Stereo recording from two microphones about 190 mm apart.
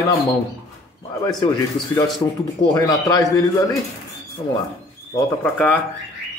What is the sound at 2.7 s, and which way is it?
Speech, 20° left (ahead or behind).